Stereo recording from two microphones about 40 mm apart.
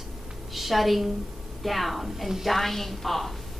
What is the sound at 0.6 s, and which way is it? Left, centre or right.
A woman's voice, centre.